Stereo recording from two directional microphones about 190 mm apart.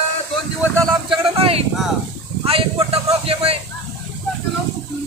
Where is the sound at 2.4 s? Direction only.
30° right (ahead or behind).